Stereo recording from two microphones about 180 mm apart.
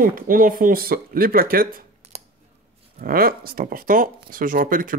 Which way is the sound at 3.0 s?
55° right (ahead or behind).